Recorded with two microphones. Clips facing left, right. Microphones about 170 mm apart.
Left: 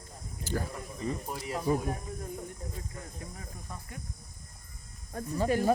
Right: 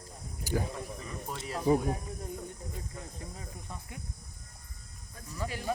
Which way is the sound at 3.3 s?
15° right (ahead or behind).